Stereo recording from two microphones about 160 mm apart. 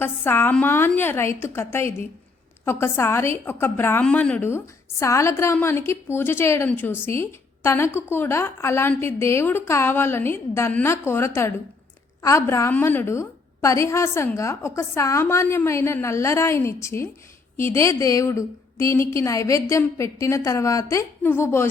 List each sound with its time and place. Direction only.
0.0 s a woman's voice: 15° left (ahead or behind)